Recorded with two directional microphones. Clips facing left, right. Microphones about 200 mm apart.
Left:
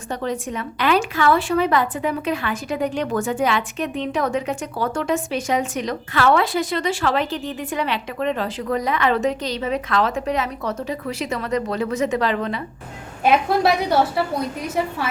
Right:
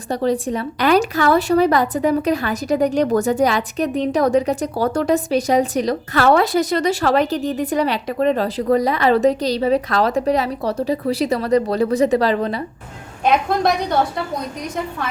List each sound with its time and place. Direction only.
0.1 s a woman's voice: 35° right (ahead or behind)
13.2 s a woman's voice: 5° left (ahead or behind)